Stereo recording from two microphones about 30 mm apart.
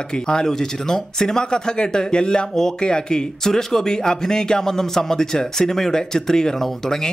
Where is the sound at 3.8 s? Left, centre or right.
Left.